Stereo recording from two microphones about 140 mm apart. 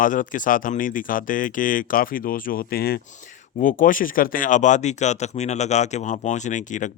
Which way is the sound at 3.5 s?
70° left (ahead or behind).